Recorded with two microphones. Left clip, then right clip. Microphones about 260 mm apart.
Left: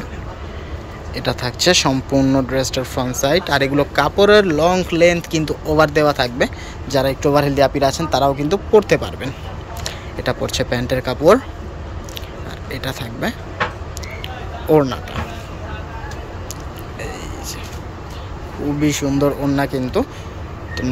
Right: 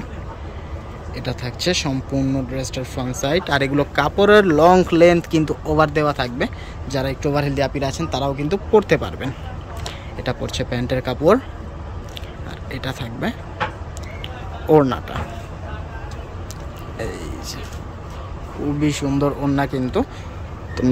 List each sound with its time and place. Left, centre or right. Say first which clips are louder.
1.1 s speech: left 7 dB; centre
12.7 s speech: left 2 dB; centre
14.7 s speech: even; centre
17.0 s vehicle: right 1 dB; right
18.8 s speech: left 3 dB; centre
20.8 s vehicle: right 5 dB; centre